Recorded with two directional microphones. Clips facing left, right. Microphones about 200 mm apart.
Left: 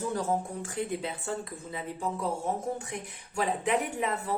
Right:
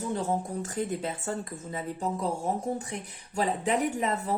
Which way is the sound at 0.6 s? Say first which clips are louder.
Right 2 dB; 45° right (ahead or behind).